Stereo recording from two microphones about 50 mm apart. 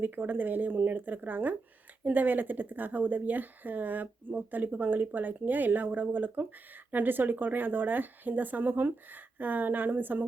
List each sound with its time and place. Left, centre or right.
0.0 s a woman's voice: right